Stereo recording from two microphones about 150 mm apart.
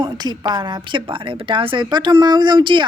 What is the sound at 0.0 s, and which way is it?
Speech, 30° right (ahead or behind).